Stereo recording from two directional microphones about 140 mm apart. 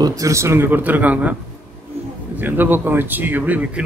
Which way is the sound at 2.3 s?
15° right (ahead or behind).